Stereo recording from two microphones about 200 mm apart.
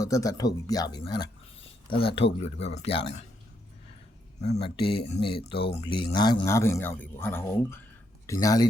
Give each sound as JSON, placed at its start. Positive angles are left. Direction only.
{"t": 0.0, "sound": "speech", "side_deg": 15}
{"t": 4.4, "sound": "speech", "side_deg": 30}